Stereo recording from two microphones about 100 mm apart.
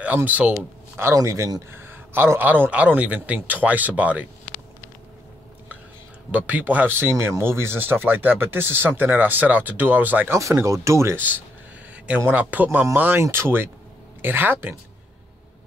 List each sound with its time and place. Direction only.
0.0 s speech: 15° right (ahead or behind)
0.9 s speech: 30° right (ahead or behind)
6.3 s speech: 15° right (ahead or behind)
10.6 s speech: 30° right (ahead or behind)